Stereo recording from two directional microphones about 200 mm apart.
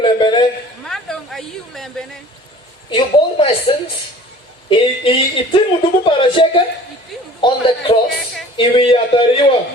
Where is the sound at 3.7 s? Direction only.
25° left (ahead or behind).